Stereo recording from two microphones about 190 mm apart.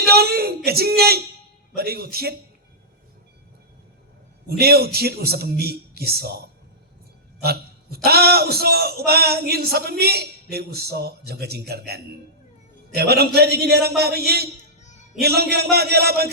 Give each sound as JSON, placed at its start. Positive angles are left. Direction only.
{"t": 0.1, "sound": "a man's voice", "side_deg": -55}
{"t": 4.4, "sound": "a man's voice", "side_deg": -55}
{"t": 7.4, "sound": "a man's voice", "side_deg": -55}
{"t": 14.8, "sound": "music", "side_deg": 40}
{"t": 15.2, "sound": "a man's voice", "side_deg": -55}